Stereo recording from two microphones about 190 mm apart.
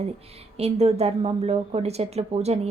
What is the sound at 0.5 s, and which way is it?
A woman's voice, 35° right (ahead or behind).